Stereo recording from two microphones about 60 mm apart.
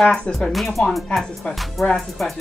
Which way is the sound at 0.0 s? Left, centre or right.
Centre.